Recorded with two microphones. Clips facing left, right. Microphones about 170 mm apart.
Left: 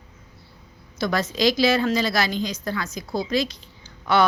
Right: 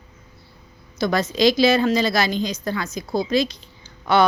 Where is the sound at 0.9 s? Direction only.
20° right (ahead or behind).